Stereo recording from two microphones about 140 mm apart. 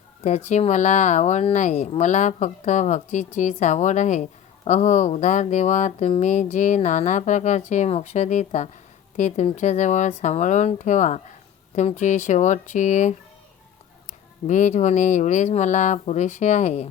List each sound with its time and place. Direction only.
0.2 s a woman's voice: 50° left (ahead or behind)
14.4 s a woman's voice: 60° left (ahead or behind)